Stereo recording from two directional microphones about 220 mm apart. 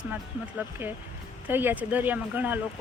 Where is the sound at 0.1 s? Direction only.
10° right (ahead or behind).